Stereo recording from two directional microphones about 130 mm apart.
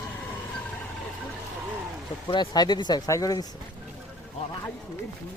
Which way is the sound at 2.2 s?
35° left (ahead or behind).